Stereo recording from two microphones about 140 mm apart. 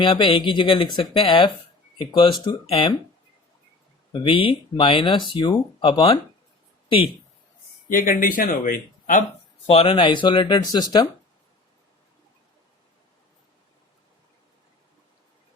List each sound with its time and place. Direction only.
0.0 s speech: 35° left (ahead or behind)
4.1 s speech: 35° left (ahead or behind)
7.9 s speech: 75° left (ahead or behind)
9.6 s speech: 40° left (ahead or behind)